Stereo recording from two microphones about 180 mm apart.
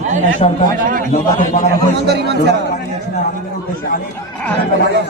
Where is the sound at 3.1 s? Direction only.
45° left (ahead or behind).